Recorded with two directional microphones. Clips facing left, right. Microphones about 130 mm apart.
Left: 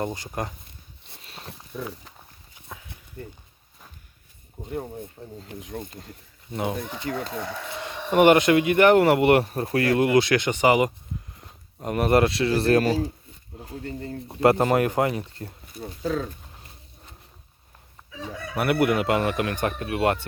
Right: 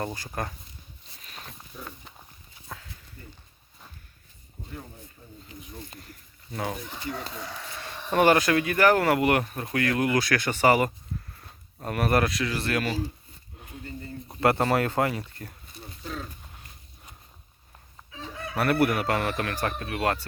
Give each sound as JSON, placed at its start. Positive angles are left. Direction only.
{"t": 0.0, "sound": "speech", "side_deg": 20}
{"t": 1.2, "sound": "a sound", "side_deg": 30}
{"t": 2.6, "sound": "a sound", "side_deg": 20}
{"t": 4.7, "sound": "speech", "side_deg": 55}
{"t": 5.4, "sound": "speech", "side_deg": 90}
{"t": 6.5, "sound": "speech", "side_deg": 20}
{"t": 7.1, "sound": "speech", "side_deg": 90}
{"t": 7.8, "sound": "speech", "side_deg": 20}
{"t": 13.8, "sound": "speech", "side_deg": 70}
{"t": 14.4, "sound": "speech", "side_deg": 20}
{"t": 18.5, "sound": "speech", "side_deg": 15}